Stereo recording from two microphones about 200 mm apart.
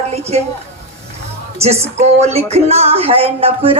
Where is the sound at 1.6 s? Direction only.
30° right (ahead or behind).